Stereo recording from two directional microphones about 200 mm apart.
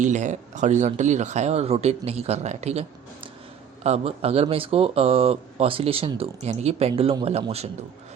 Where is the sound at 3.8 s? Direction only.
30° right (ahead or behind).